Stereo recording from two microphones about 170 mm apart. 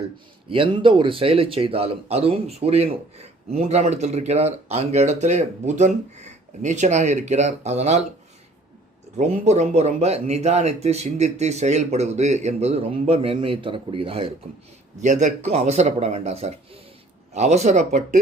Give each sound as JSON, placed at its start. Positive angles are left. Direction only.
{"t": 0.4, "sound": "speech", "side_deg": -30}
{"t": 9.1, "sound": "speech", "side_deg": -40}
{"t": 15.0, "sound": "speech", "side_deg": -45}